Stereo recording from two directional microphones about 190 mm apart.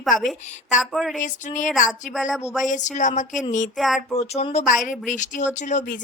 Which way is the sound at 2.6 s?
40° left (ahead or behind).